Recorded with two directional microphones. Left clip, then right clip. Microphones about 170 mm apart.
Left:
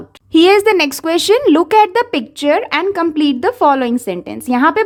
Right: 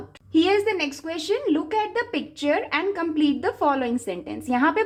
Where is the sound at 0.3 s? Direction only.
45° left (ahead or behind).